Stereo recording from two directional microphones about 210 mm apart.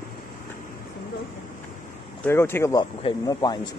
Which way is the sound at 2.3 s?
10° left (ahead or behind).